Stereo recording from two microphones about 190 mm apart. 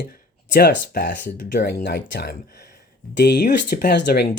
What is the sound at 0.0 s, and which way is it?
Speech, 55° left (ahead or behind).